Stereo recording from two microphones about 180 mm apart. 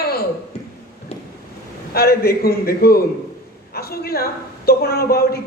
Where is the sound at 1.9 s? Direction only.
60° left (ahead or behind).